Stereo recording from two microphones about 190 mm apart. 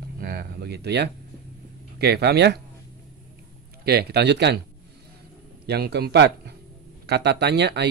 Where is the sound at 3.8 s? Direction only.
55° right (ahead or behind).